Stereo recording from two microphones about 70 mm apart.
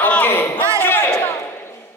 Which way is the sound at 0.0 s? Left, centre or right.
Left.